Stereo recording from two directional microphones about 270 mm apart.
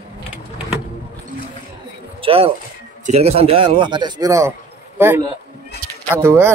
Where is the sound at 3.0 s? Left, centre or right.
Right.